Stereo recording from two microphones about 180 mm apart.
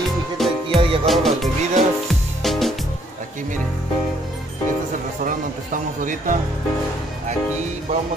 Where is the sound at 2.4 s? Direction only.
Centre (ahead or behind).